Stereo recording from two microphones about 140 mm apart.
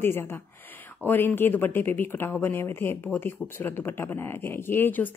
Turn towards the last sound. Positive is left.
turn(degrees=15)  # may be behind; listen again after turning